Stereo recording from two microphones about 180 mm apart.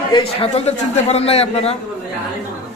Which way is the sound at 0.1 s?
35° left (ahead or behind).